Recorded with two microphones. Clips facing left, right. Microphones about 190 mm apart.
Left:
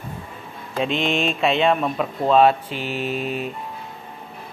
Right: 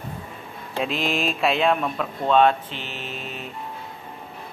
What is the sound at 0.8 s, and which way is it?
Speech, centre (ahead or behind).